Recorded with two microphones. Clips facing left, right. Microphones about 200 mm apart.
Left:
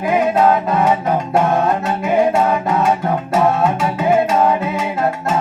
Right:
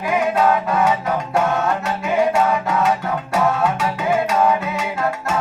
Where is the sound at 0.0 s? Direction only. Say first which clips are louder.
Left 4 dB; 25° left (ahead or behind).